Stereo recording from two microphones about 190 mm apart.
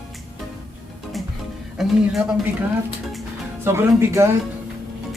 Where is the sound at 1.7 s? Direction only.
Centre (ahead or behind).